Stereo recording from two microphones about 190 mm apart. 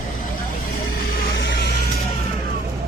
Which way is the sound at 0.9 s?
65° left (ahead or behind).